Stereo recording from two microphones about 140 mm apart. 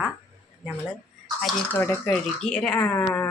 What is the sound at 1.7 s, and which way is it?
Speech, 10° left (ahead or behind).